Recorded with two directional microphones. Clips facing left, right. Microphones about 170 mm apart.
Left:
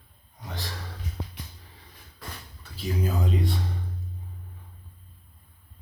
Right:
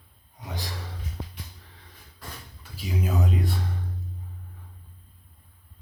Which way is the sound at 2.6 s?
10° right (ahead or behind).